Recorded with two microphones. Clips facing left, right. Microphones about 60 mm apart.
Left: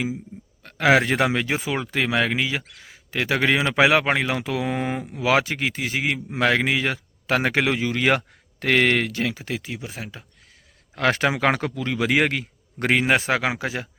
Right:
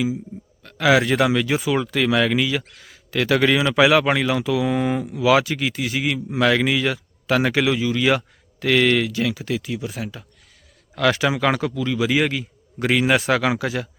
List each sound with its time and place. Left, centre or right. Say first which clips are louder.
0.6 s speech: right 1 dB; left